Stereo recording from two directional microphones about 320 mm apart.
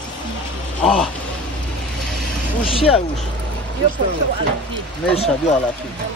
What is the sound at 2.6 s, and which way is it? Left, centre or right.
Speech, centre.